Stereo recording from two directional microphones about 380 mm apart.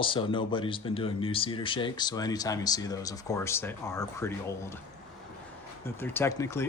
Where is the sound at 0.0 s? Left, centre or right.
Centre.